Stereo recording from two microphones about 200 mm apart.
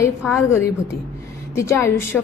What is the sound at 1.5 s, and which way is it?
Speech, 15° left (ahead or behind).